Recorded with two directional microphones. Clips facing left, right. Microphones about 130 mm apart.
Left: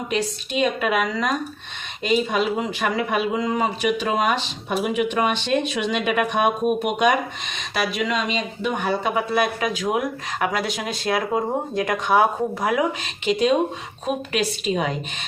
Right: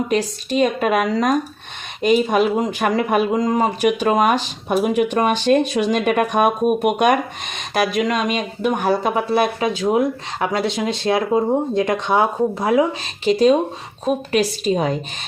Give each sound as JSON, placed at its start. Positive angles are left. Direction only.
{"t": 0.1, "sound": "speech", "side_deg": -45}
{"t": 13.2, "sound": "speech", "side_deg": -35}